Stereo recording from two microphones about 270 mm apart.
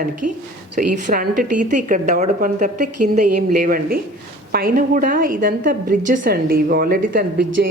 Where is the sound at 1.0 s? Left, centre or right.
Right.